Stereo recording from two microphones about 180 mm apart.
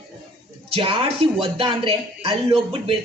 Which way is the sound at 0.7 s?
30° right (ahead or behind).